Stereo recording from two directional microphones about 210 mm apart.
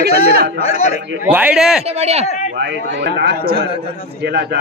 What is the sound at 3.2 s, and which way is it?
Speech, 50° right (ahead or behind).